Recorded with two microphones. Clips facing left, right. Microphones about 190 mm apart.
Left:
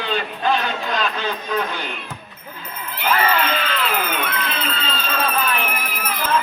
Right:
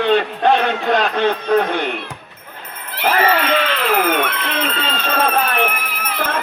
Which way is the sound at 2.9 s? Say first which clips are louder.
Right 3 dB; 75° right (ahead or behind).